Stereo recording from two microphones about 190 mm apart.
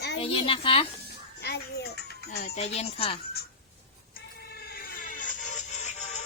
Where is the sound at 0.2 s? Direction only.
30° left (ahead or behind).